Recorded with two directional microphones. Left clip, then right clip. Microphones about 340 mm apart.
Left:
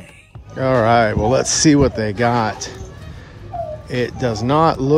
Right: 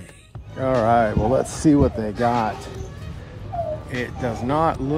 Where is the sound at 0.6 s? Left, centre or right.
Centre.